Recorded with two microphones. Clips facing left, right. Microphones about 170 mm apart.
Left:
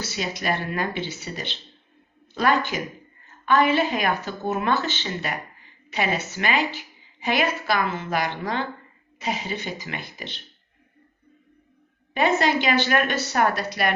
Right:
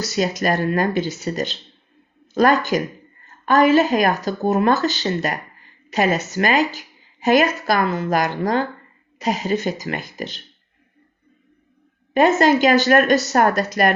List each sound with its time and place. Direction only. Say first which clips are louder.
0.0 s a woman's voice: right 8 dB; 45° right (ahead or behind)
12.1 s speech: right 6 dB; 45° right (ahead or behind)